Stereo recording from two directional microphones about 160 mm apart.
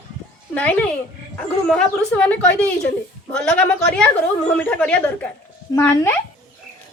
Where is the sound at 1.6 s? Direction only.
5° left (ahead or behind).